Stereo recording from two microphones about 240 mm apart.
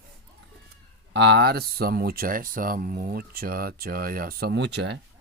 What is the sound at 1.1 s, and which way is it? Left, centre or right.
Speech, right.